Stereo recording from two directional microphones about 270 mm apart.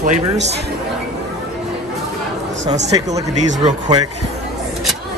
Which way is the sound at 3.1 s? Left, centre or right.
Right.